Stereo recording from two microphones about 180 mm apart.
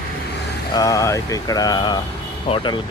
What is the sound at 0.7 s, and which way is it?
Speech, 20° left (ahead or behind).